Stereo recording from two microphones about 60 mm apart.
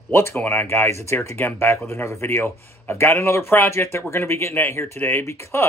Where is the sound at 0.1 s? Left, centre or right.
Left.